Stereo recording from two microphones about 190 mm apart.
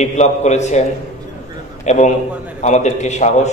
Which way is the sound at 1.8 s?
40° left (ahead or behind).